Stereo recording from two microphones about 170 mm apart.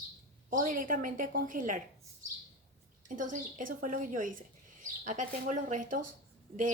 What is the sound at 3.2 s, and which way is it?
A woman's voice, 50° right (ahead or behind).